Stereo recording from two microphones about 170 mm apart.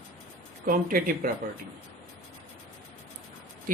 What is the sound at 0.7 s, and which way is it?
Speech, 55° right (ahead or behind).